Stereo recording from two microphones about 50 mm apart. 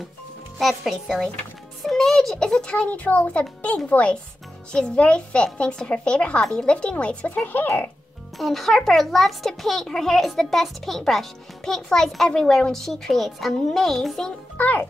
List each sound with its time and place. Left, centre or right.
0.6 s speech: centre
1.9 s a child's voice: centre; by 7.2 s left
8.4 s a woman's voice: centre
14.6 s a child's voice: left